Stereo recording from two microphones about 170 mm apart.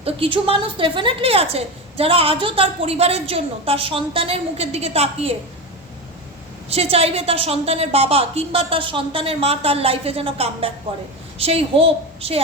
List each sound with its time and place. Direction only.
0.0 s a woman's voice: 35° right (ahead or behind)
6.7 s a woman's voice: 35° right (ahead or behind)